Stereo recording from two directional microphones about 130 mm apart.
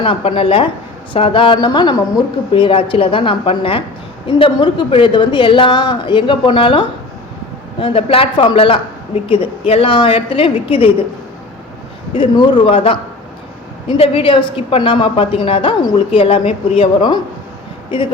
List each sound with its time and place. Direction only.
0.0 s a woman's voice: 45° left (ahead or behind)
12.1 s a woman's voice: 40° left (ahead or behind)